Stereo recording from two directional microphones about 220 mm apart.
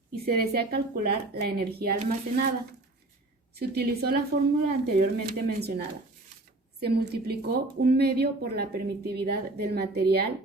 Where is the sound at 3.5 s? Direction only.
45° right (ahead or behind).